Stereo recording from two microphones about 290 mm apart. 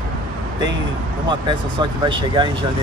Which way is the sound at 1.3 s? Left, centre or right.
Centre.